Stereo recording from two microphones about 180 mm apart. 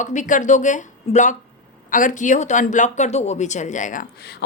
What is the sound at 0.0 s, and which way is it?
Speech, 45° left (ahead or behind).